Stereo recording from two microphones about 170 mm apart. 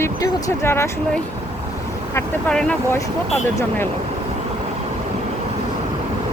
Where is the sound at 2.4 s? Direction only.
5° left (ahead or behind).